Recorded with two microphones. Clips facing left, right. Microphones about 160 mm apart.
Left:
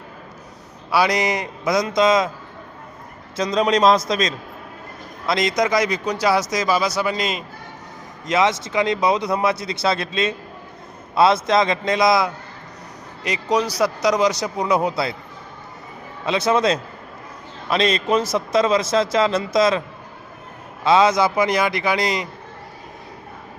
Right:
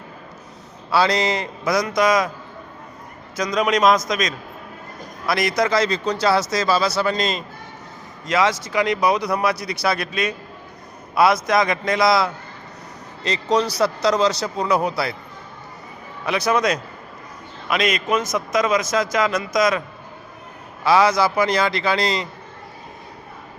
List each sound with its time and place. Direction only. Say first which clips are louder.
0.9 s a man's voice: even; 15° left (ahead or behind)
3.3 s a man's voice: left 2 dB; 30° left (ahead or behind); by 7.4 s 10° left (ahead or behind)
8.3 s a man's voice: left 1 dB; 20° left (ahead or behind)
16.2 s a man's voice: left 1 dB; 25° left (ahead or behind)
20.8 s a man's voice: left 1 dB; 20° left (ahead or behind)